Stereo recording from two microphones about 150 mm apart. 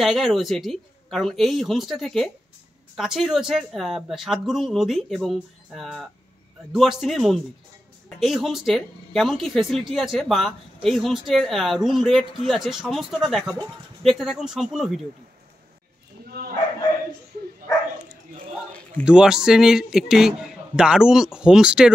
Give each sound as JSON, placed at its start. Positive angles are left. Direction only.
{"t": 0.0, "sound": "speech", "side_deg": 0}
{"t": 16.3, "sound": "bow-wow", "side_deg": -80}
{"t": 19.0, "sound": "speech", "side_deg": -5}